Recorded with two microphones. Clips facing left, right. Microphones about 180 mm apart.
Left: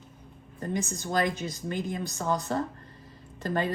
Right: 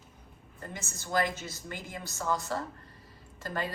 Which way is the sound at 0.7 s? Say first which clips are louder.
Left 3 dB; 15° left (ahead or behind).